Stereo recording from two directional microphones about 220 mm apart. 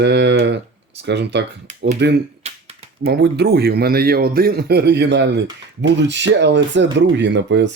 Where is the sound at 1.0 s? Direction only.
50° right (ahead or behind).